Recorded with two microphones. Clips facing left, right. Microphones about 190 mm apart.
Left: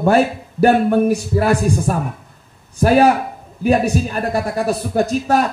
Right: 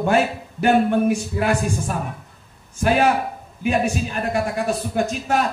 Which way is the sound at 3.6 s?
35° left (ahead or behind).